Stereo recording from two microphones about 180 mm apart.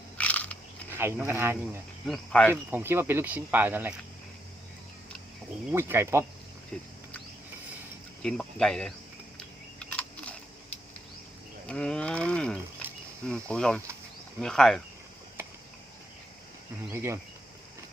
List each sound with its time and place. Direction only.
0.2 s biting: 5° left (ahead or behind)
0.9 s speech: 15° right (ahead or behind)
2.0 s speech: 5° left (ahead or behind)
2.5 s speech: 10° right (ahead or behind)
5.7 s speech: 15° right (ahead or behind)
8.2 s speech: 5° left (ahead or behind)
9.9 s a sound: 5° left (ahead or behind)
11.6 s speech: 5° left (ahead or behind)
16.9 s speech: 15° right (ahead or behind)